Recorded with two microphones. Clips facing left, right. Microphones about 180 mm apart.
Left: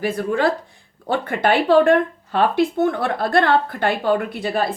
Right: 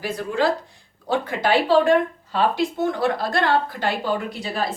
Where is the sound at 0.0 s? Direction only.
55° left (ahead or behind).